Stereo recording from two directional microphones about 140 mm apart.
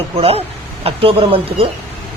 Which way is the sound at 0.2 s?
45° right (ahead or behind).